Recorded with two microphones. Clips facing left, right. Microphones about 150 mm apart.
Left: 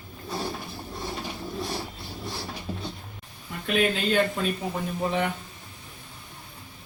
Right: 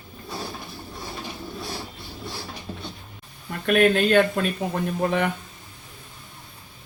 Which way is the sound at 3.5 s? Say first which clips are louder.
Right 6 dB; 65° right (ahead or behind).